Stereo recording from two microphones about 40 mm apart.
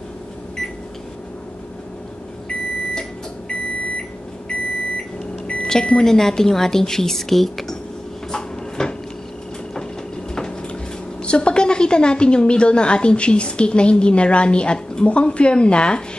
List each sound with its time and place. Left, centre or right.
2.9 s microwave oven: centre
5.5 s speech: left; by 7.7 s centre
8.3 s a sound: centre
11.2 s a woman's voice: left